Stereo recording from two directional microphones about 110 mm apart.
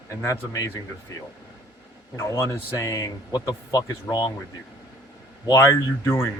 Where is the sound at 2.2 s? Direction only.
25° left (ahead or behind).